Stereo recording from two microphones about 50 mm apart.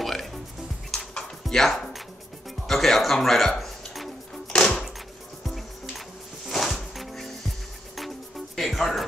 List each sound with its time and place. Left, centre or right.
0.0 s music: centre
1.4 s music: centre
4.6 s a sound: centre
5.4 s music: centre
8.5 s music: centre